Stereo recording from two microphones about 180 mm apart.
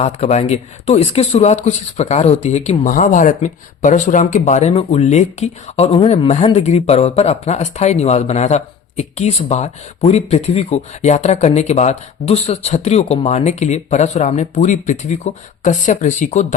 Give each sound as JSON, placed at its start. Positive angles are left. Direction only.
{"t": 0.0, "sound": "speech", "side_deg": 35}